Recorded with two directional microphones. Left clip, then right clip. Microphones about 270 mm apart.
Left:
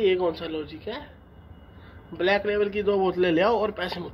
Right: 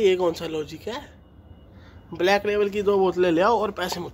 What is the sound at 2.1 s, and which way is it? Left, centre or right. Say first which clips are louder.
A man's voice: right 2 dB; right.